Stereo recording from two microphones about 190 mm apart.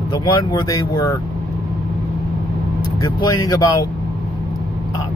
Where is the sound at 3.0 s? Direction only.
20° left (ahead or behind).